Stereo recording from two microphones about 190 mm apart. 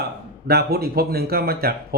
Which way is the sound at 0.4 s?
55° right (ahead or behind).